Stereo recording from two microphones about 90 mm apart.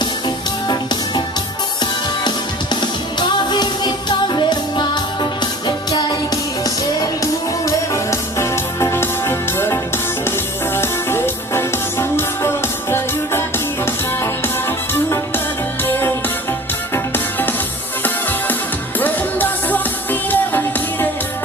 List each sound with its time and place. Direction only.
0.0 s music: 55° left (ahead or behind)
2.8 s music: 55° left (ahead or behind)
7.6 s music: 35° left (ahead or behind)
15.8 s music: 25° left (ahead or behind)
18.0 s music: 20° left (ahead or behind)